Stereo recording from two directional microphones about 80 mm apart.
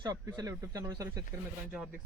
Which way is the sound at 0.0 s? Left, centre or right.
Right.